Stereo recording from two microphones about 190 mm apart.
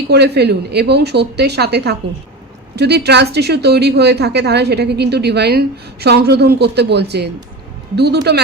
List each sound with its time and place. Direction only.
0.1 s a woman's voice: 60° right (ahead or behind)